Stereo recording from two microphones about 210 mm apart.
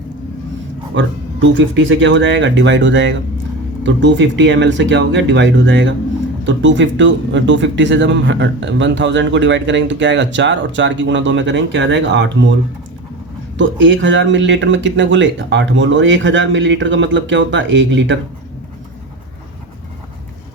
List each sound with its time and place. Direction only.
0.9 s speech: 60° right (ahead or behind)
13.6 s speech: 60° right (ahead or behind)